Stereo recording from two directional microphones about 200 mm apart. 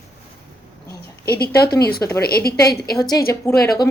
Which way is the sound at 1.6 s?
50° left (ahead or behind).